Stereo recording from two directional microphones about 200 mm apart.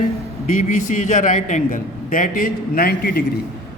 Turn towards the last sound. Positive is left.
turn(degrees=50)  # may be behind; listen again after turning